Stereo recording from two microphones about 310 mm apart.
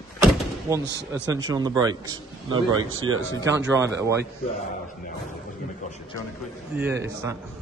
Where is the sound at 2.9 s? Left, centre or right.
Right.